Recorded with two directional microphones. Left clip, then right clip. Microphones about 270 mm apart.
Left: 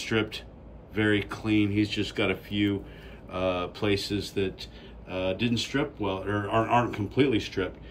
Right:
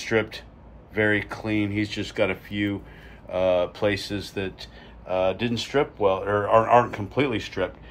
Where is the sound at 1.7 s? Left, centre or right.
Centre.